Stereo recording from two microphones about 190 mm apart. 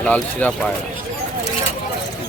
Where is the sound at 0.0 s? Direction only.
10° left (ahead or behind).